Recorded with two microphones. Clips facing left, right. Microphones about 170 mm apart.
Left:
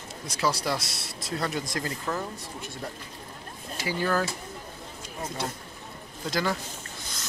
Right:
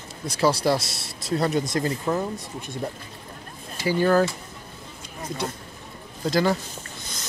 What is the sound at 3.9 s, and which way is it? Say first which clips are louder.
Speech: right 8 dB; 35° right (ahead or behind).